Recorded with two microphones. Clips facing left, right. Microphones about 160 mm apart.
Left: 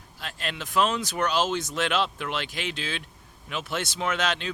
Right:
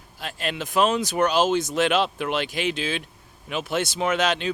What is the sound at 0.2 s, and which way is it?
Speech, 10° right (ahead or behind).